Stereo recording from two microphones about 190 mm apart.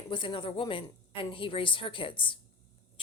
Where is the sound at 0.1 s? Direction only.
25° left (ahead or behind).